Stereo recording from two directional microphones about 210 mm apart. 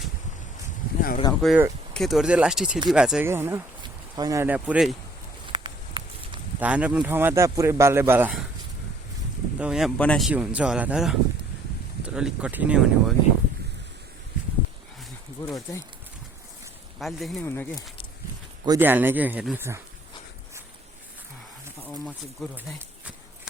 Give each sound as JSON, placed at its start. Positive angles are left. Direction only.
{"t": 1.3, "sound": "speech", "side_deg": 0}
{"t": 5.5, "sound": "walk", "side_deg": -25}
{"t": 6.6, "sound": "speech", "side_deg": -5}
{"t": 9.6, "sound": "speech", "side_deg": -5}
{"t": 15.4, "sound": "a sound", "side_deg": 10}
{"t": 17.0, "sound": "speech", "side_deg": 0}
{"t": 18.6, "sound": "speech", "side_deg": -15}
{"t": 22.0, "sound": "speech", "side_deg": -5}